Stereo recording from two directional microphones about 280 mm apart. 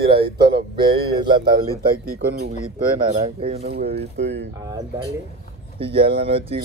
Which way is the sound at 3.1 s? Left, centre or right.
Centre.